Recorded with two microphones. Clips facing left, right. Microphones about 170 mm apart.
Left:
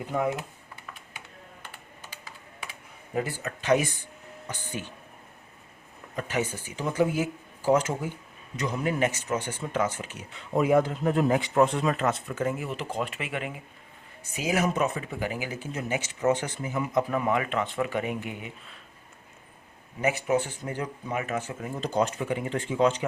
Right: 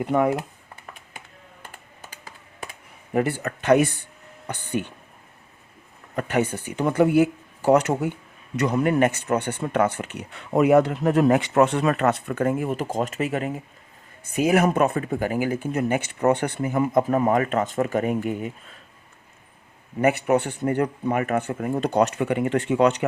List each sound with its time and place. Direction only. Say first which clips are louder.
0.0 s speech: right 7 dB; 65° right (ahead or behind)
1.6 s computer keyboard: right 2 dB; 50° right (ahead or behind)
3.1 s speech: right 7 dB; 65° right (ahead or behind)
6.1 s speech: right 6 dB; 60° right (ahead or behind); by 13.6 s 40° right (ahead or behind)
14.3 s speech: right 7 dB; 55° right (ahead or behind)
20.0 s speech: right 6 dB; 60° right (ahead or behind)